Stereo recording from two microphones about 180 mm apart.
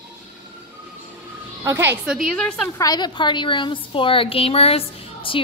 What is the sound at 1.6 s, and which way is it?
Speech, 15° right (ahead or behind).